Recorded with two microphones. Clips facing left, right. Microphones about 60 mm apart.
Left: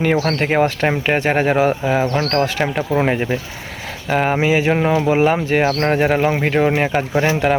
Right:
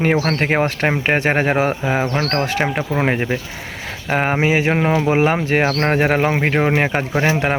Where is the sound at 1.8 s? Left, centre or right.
Right.